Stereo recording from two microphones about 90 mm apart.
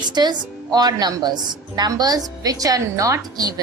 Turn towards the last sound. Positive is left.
turn(degrees=-40)  # may be behind; listen again after turning